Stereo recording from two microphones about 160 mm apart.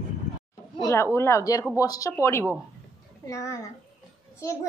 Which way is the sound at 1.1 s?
15° left (ahead or behind).